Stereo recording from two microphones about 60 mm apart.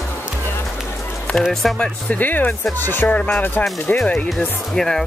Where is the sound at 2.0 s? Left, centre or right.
Left.